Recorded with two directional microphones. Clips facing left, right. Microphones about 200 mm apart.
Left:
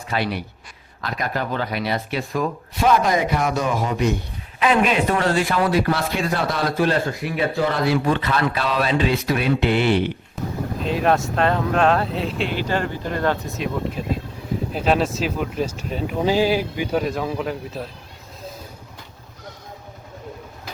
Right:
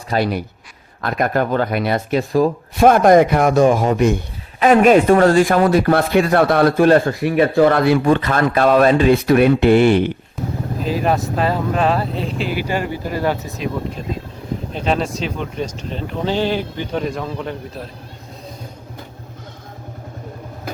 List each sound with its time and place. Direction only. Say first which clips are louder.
0.1 s speech: right 6 dB; 45° right (ahead or behind)
1.0 s speech: right 8 dB; 55° right (ahead or behind)
2.7 s speech: right 8 dB; 50° right (ahead or behind)
10.8 s speech: right 1 dB; centre (ahead or behind)
14.7 s speech: even; 5° left (ahead or behind)